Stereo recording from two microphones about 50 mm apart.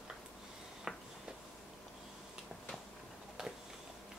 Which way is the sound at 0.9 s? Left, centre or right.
Centre.